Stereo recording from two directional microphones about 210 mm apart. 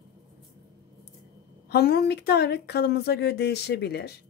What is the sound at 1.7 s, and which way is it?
A woman's voice, 50° left (ahead or behind).